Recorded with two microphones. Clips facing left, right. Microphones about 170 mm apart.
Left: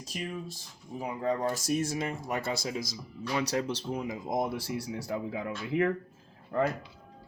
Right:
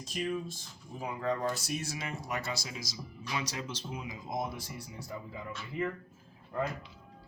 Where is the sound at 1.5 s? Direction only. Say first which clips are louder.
Left 6 dB; 45° left (ahead or behind); by 5.9 s 75° left (ahead or behind).